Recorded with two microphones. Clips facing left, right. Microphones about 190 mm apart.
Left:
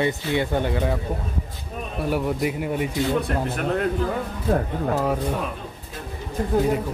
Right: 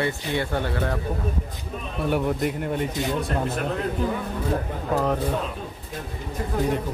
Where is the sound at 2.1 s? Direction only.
Centre (ahead or behind).